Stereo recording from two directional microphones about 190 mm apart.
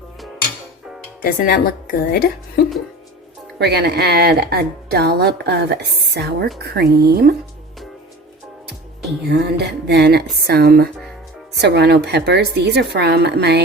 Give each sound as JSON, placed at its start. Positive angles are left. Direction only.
{"t": 1.2, "sound": "a woman's voice", "side_deg": 50}
{"t": 3.6, "sound": "a woman's voice", "side_deg": -60}
{"t": 9.3, "sound": "a woman's voice", "side_deg": -60}